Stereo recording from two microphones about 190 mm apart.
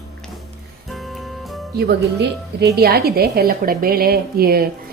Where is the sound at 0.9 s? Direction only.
Centre (ahead or behind).